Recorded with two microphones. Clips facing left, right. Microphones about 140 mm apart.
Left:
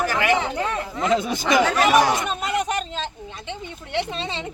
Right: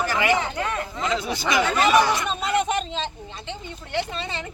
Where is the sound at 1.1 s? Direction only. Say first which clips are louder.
Left 3 dB; 50° left (ahead or behind).